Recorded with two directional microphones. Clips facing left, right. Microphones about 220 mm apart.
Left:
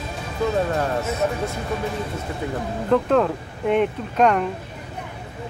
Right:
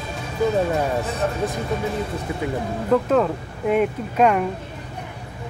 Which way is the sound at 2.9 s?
5° right (ahead or behind).